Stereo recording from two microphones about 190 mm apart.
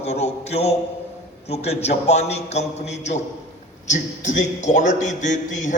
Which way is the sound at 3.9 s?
40° left (ahead or behind).